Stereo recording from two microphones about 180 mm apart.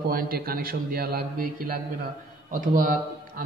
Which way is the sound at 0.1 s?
55° right (ahead or behind).